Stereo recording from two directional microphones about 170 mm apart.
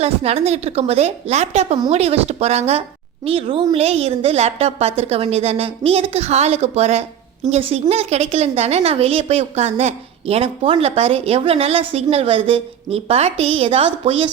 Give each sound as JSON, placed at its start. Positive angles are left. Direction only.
{"t": 0.0, "sound": "a woman's voice", "side_deg": -35}